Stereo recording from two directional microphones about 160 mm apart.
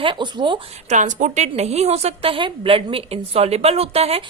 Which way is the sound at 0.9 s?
50° right (ahead or behind).